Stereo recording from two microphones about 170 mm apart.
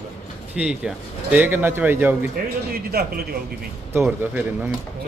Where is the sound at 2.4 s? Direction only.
55° right (ahead or behind).